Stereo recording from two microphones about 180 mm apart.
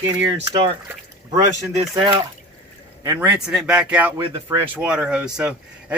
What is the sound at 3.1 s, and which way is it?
Speech, 10° right (ahead or behind).